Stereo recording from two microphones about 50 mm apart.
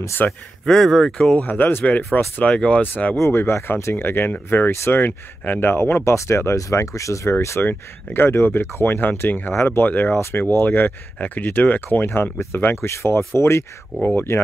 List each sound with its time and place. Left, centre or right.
0.2 s speech: left
0.7 s speech: centre
1.4 s speech: left
2.1 s speech: left
3.3 s speech: left
6.1 s speech: left
7.6 s speech: left
10.1 s speech: left
10.5 s speech: left
12.8 s speech: left